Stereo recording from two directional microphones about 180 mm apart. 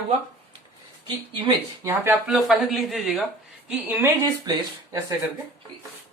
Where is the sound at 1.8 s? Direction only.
20° right (ahead or behind).